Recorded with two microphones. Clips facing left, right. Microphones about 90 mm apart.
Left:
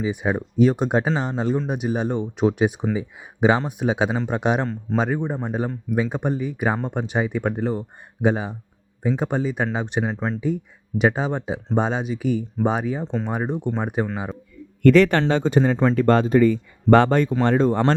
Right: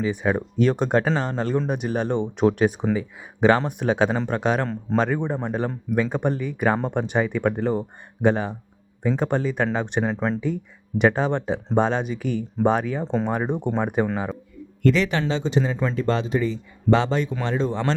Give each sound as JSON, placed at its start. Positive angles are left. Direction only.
{"t": 0.0, "sound": "speech", "side_deg": 10}
{"t": 14.8, "sound": "speech", "side_deg": 55}
{"t": 15.7, "sound": "speech", "side_deg": 60}